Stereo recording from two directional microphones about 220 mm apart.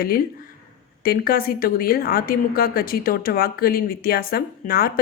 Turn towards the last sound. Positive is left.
turn(degrees=40)  # may be behind; listen again after turning